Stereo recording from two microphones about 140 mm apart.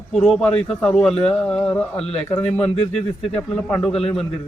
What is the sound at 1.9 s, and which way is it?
Speech, 45° left (ahead or behind).